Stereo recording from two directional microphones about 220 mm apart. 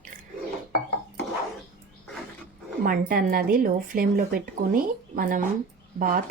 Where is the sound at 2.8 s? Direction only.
40° right (ahead or behind).